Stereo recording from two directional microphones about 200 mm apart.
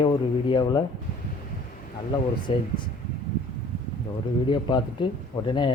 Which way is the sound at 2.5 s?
25° left (ahead or behind).